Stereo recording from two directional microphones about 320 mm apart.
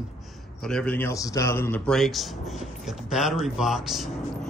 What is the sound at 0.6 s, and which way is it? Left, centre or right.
A man's voice, centre.